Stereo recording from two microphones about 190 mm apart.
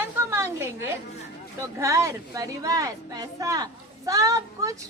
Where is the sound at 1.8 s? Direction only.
15° right (ahead or behind).